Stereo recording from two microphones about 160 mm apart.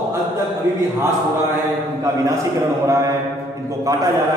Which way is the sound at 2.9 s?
20° right (ahead or behind).